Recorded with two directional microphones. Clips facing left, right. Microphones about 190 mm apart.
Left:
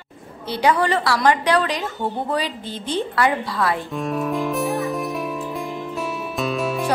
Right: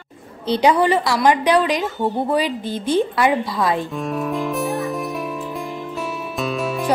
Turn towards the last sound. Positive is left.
turn(degrees=0)  # may be behind; listen again after turning